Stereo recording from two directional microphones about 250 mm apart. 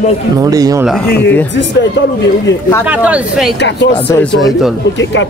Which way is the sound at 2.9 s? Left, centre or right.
Centre.